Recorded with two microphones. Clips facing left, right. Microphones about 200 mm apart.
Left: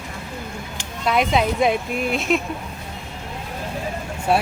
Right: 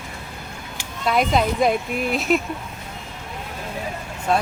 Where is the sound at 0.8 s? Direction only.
Centre (ahead or behind).